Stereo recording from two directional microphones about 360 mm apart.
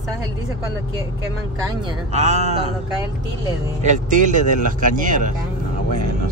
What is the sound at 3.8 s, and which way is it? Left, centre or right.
Speech, right.